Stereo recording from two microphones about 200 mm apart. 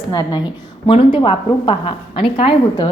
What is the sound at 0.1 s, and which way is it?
A woman's voice, 20° left (ahead or behind).